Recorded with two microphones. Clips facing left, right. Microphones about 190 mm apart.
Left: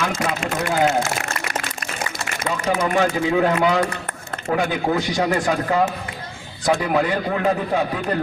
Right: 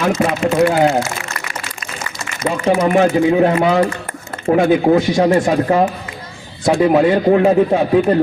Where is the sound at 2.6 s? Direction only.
30° right (ahead or behind).